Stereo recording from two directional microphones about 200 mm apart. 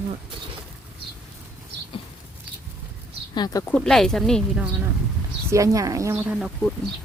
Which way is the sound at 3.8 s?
Centre (ahead or behind).